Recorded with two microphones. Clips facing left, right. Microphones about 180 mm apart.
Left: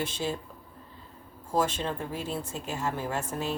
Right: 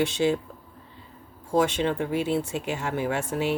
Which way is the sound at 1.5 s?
80° right.